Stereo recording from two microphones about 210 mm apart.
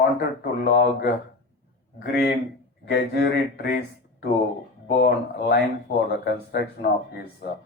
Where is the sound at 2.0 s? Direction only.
50° left (ahead or behind).